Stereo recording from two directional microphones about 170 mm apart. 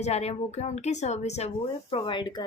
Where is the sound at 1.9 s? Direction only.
30° left (ahead or behind).